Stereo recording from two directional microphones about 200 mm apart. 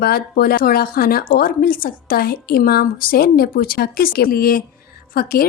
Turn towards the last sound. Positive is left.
turn(degrees=50)  # may be behind; listen again after turning